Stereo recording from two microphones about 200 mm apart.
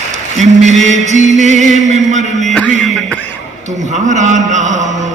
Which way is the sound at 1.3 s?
35° right (ahead or behind).